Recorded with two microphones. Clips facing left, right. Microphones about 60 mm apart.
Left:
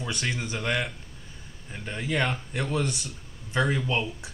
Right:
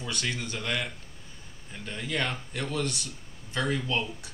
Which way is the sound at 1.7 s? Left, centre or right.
Left.